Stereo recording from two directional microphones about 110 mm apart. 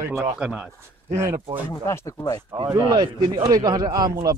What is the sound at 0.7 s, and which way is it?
Speech, 25° right (ahead or behind).